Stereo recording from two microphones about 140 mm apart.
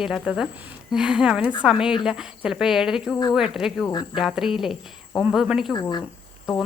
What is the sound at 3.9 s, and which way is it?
Speech, 30° left (ahead or behind).